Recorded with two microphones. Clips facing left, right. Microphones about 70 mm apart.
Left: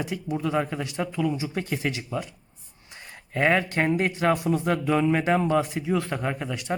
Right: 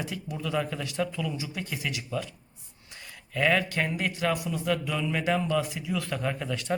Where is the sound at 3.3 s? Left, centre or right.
Left.